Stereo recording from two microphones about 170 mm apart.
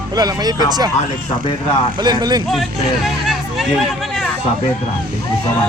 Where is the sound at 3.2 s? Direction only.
Centre (ahead or behind).